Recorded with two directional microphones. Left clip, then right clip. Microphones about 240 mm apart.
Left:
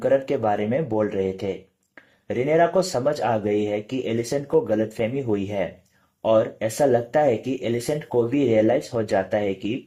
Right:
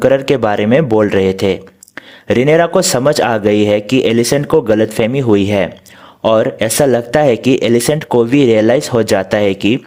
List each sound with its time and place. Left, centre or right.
0.0 s speech: right